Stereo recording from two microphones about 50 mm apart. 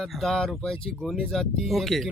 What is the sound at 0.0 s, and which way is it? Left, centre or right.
Speech, centre.